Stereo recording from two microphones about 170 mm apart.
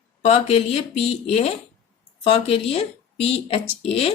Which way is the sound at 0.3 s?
35° left (ahead or behind).